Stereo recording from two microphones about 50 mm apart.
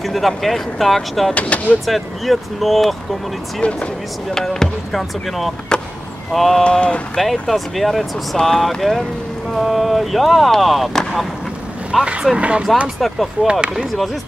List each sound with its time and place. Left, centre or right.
0.0 s a sound: centre
0.4 s speech: centre
1.3 s speech: left
1.9 s speech: centre
3.6 s speech: left
4.3 s speech: centre
5.7 s vehicle: centre
6.3 s speech: centre
6.6 s speech: left
7.2 s speech: centre
8.4 s speech: centre
12.0 s speech: right
13.0 s speech: centre
13.5 s speech: centre